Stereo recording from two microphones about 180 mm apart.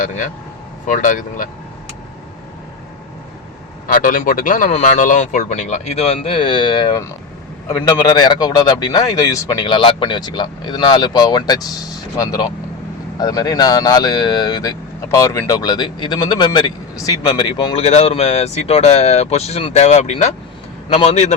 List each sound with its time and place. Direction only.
0.0 s speech: 45° left (ahead or behind)
3.8 s speech: 50° left (ahead or behind)